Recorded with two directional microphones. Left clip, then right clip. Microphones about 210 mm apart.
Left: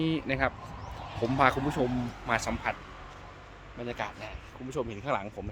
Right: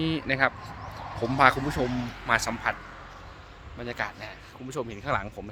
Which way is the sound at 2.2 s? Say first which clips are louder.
Right 5 dB; 5° left (ahead or behind).